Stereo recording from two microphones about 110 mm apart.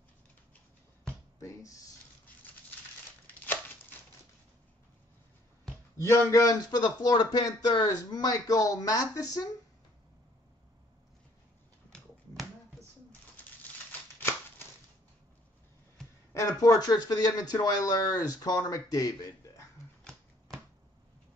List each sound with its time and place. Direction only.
1.4 s speech: 30° left (ahead or behind)
5.9 s speech: 25° left (ahead or behind)
11.9 s finger snapping: 5° left (ahead or behind)
16.3 s speech: 30° left (ahead or behind)
20.0 s shuffling cards: 5° left (ahead or behind)